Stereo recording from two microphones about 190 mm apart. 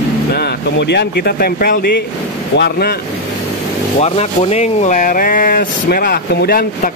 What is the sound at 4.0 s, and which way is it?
Speech, 35° left (ahead or behind).